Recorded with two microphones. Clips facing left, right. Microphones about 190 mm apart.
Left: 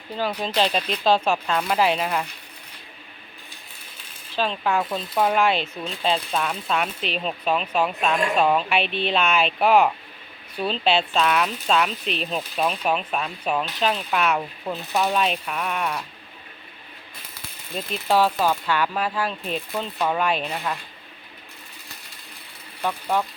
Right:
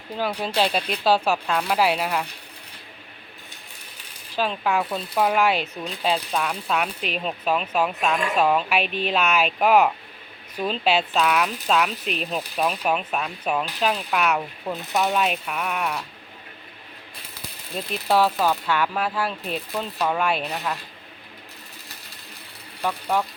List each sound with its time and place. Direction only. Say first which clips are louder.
0.2 s speech: even; 10° right (ahead or behind)
4.4 s speech: even; 5° right (ahead or behind)
18.6 s speech: even; 5° right (ahead or behind)
22.8 s speech: even; 5° right (ahead or behind)